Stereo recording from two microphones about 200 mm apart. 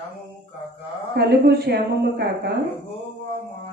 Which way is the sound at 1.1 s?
55° right (ahead or behind).